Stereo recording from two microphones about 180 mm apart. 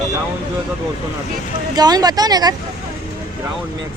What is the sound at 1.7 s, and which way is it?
Speech, 20° right (ahead or behind).